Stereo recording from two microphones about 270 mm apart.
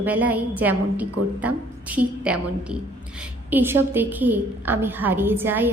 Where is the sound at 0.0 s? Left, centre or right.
Centre.